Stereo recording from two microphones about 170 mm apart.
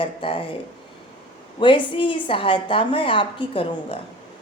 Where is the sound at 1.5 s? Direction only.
30° left (ahead or behind).